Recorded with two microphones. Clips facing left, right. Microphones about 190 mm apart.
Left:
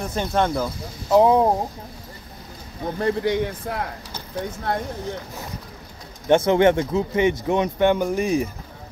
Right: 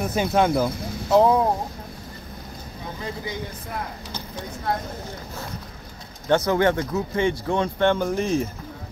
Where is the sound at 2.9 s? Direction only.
70° left (ahead or behind).